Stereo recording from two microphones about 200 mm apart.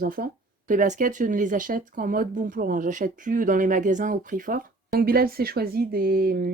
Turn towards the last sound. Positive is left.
turn(degrees=-50)  # may be behind; listen again after turning